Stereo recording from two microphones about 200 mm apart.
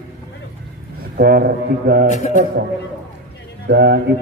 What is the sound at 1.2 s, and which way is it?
Speech, 50° right (ahead or behind).